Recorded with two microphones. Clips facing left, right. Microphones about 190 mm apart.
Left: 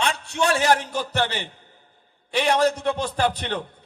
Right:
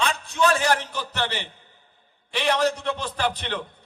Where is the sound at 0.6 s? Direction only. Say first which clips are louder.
Left 3 dB; 45° left (ahead or behind).